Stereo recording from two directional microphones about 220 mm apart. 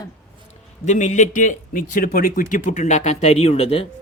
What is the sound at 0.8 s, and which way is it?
A man's voice, 35° left (ahead or behind).